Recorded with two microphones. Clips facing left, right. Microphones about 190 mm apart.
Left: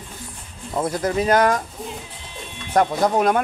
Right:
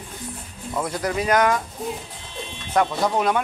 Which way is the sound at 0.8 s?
25° left (ahead or behind).